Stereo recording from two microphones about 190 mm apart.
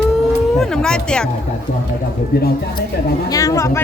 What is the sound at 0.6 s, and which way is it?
Speech, 5° left (ahead or behind).